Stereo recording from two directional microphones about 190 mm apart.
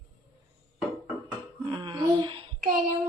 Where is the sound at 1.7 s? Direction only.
25° right (ahead or behind).